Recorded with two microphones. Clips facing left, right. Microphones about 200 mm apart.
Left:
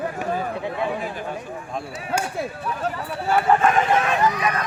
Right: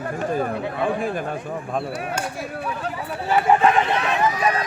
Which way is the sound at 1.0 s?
50° right (ahead or behind).